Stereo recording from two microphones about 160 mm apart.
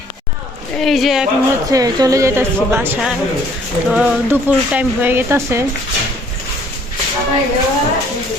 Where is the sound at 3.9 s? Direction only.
5° right (ahead or behind).